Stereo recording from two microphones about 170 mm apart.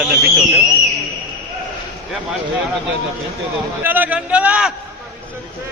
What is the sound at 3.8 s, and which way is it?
Speech, 10° right (ahead or behind).